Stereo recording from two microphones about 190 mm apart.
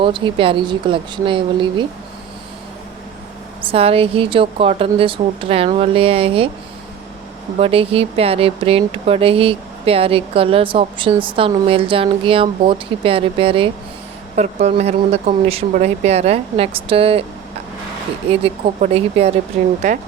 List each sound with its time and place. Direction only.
0.0 s speech: 25° right (ahead or behind)
3.6 s speech: 30° right (ahead or behind)
7.6 s speech: 30° right (ahead or behind)
18.3 s speech: 30° right (ahead or behind)